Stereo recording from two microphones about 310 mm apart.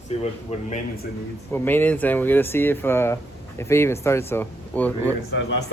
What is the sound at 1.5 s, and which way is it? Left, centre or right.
Speech, centre.